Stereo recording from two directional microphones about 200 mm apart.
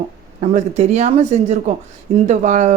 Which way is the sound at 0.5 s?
35° right (ahead or behind).